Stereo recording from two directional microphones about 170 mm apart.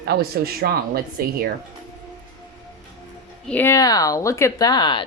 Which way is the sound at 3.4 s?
10° left (ahead or behind).